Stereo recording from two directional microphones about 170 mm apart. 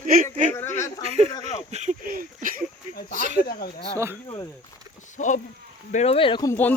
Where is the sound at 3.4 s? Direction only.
60° left (ahead or behind).